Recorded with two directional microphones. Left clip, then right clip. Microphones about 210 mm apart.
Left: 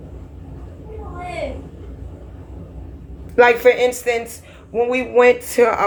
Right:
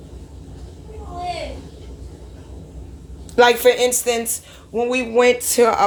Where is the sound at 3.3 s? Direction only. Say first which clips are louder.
Left 1 dB; 35° right (ahead or behind).